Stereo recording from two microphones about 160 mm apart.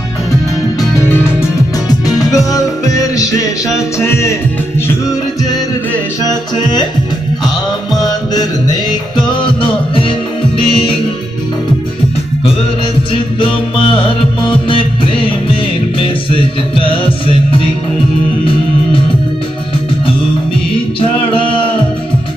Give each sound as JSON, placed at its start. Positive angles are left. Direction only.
{"t": 1.1, "sound": "music", "side_deg": 20}
{"t": 6.2, "sound": "music", "side_deg": 25}
{"t": 13.4, "sound": "music", "side_deg": 30}
{"t": 21.0, "sound": "a sound", "side_deg": 35}